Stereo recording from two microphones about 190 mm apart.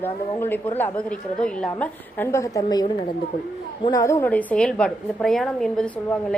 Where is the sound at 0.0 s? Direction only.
10° left (ahead or behind).